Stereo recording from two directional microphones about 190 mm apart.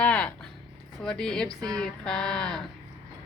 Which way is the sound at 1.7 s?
5° left (ahead or behind).